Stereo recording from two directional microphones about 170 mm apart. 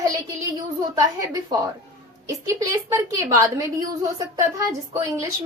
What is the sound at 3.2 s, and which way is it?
A woman's voice, 20° right (ahead or behind).